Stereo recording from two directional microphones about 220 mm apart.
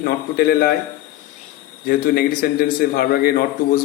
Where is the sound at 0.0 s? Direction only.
40° left (ahead or behind).